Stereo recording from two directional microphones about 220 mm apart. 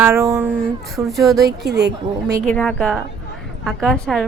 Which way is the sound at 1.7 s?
50° right (ahead or behind).